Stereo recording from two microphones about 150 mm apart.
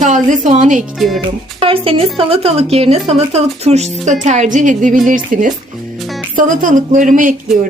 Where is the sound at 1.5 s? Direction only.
40° right (ahead or behind); by 7.4 s 60° right (ahead or behind).